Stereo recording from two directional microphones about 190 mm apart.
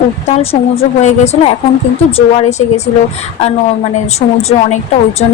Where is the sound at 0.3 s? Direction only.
35° left (ahead or behind).